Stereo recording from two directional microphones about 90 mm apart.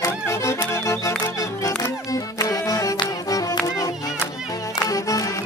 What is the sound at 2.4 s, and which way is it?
Music, 40° left (ahead or behind).